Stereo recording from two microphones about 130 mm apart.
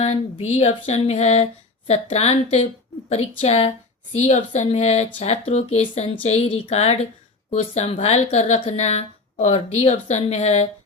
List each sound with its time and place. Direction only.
0.0 s speech: 55° left (ahead or behind)
4.2 s speech: 65° left (ahead or behind)